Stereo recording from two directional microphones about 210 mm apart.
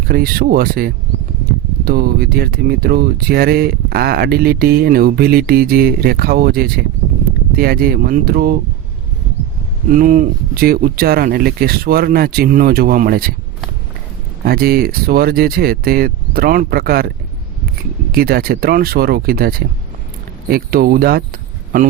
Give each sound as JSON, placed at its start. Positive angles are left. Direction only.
{"t": 0.1, "sound": "speech", "side_deg": -45}
{"t": 9.9, "sound": "speech", "side_deg": -40}
{"t": 14.4, "sound": "speech", "side_deg": -45}
{"t": 18.1, "sound": "speech", "side_deg": -45}